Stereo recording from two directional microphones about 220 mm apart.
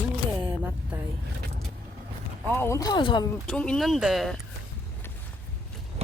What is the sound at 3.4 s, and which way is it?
Speech, 5° left (ahead or behind).